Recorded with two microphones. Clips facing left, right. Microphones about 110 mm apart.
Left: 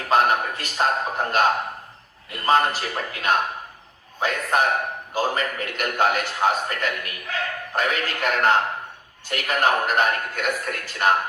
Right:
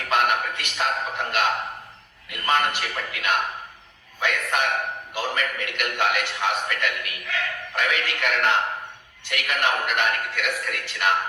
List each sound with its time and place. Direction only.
0.0 s a man's voice: 35° left (ahead or behind)